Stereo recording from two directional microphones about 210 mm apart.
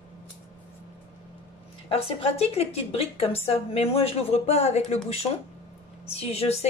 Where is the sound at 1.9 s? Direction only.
30° left (ahead or behind).